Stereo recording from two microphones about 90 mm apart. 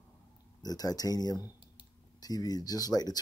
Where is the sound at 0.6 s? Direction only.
45° left (ahead or behind).